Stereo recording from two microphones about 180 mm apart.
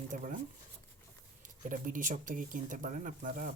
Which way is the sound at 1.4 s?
45° right (ahead or behind).